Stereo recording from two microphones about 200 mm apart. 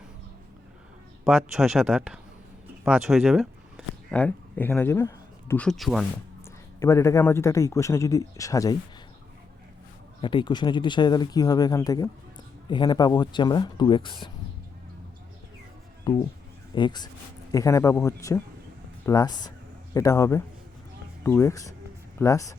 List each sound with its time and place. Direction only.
1.2 s a man's voice: centre (ahead or behind)
6.7 s speech: 15° left (ahead or behind)
10.2 s speech: 25° left (ahead or behind)
16.1 s speech: 20° left (ahead or behind)